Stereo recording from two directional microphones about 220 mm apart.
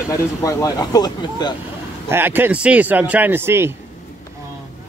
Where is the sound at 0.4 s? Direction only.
15° left (ahead or behind).